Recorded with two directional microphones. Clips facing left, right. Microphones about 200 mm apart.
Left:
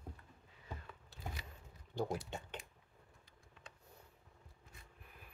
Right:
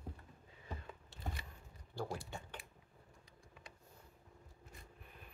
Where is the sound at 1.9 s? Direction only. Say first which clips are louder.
Left 4 dB; 20° left (ahead or behind).